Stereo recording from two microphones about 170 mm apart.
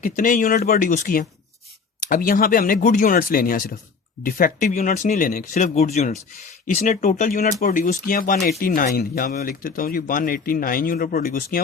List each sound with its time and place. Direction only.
0.0 s speech: 55° left (ahead or behind)